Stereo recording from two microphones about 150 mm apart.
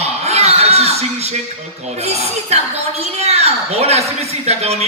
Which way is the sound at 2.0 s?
45° right (ahead or behind).